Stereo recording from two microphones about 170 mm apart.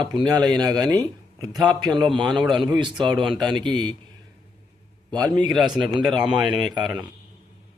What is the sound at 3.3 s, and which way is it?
Speech, centre (ahead or behind).